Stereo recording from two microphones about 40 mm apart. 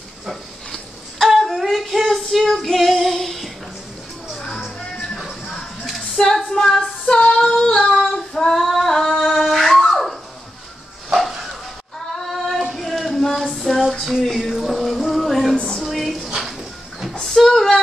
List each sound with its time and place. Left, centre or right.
0.7 s a sound: centre
2.3 s female singing: centre
4.9 s music: centre
6.5 s female singing: centre
7.5 s singing: centre
7.9 s female singing: centre
11.1 s bow-wow: centre
12.2 s female singing: centre
12.7 s a sound: centre
14.2 s music: centre
15.5 s a sound: centre
15.8 s a sound: centre